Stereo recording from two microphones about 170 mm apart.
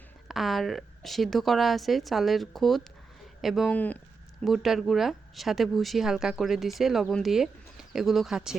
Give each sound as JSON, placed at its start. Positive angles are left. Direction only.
{"t": 0.3, "sound": "speech", "side_deg": 0}